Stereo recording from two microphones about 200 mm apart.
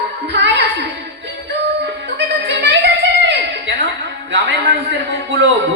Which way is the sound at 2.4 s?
60° right (ahead or behind).